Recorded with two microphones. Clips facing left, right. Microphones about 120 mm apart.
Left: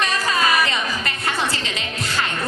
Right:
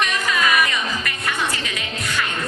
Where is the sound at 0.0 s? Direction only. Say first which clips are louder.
Left 1 dB; 35° left (ahead or behind).